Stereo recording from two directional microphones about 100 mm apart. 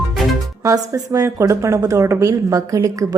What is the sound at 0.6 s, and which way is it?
A woman's voice, 35° right (ahead or behind).